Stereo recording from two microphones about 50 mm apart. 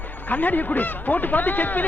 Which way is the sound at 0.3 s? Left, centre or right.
Left.